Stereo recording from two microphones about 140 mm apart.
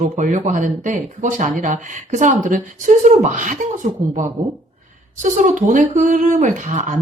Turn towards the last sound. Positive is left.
turn(degrees=-60)  # may be behind; listen again after turning